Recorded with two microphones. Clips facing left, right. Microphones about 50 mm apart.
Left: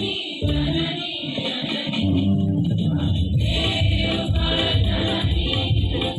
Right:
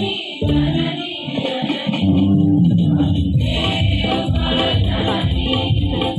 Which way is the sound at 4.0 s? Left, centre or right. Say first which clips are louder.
Right 5 dB; right.